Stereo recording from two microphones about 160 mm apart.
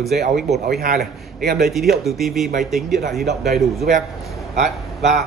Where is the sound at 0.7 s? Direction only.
75° right (ahead or behind).